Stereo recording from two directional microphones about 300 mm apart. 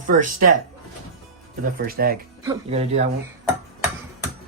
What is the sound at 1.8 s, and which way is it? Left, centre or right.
Speech, right.